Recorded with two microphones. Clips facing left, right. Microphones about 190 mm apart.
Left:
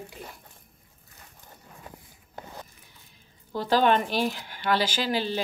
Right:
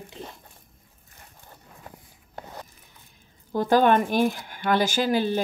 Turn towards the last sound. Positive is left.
turn(degrees=-50)  # may be behind; listen again after turning